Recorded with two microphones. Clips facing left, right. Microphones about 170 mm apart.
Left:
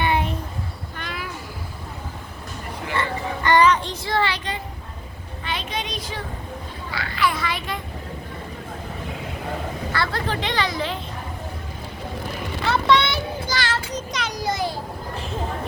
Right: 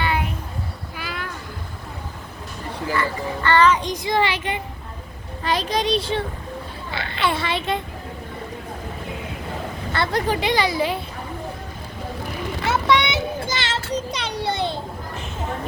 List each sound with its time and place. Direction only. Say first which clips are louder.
0.0 s child singing: left 2 dB; 25° left (ahead or behind)
0.9 s a sound: right 1 dB; 5° right (ahead or behind)
2.9 s a child's voice: right 1 dB; 20° left (ahead or behind)
3.8 s speech: right 2 dB; 15° right (ahead or behind)
5.4 s a child's voice: right 7 dB; 40° right (ahead or behind)
9.9 s speech: right 5 dB; 20° right (ahead or behind)
12.9 s child singing: even; 15° right (ahead or behind)
13.9 s a child's voice: right 3 dB; 30° right (ahead or behind)